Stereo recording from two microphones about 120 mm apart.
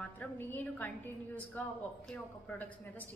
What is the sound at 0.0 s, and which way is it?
A woman's voice, 15° left (ahead or behind).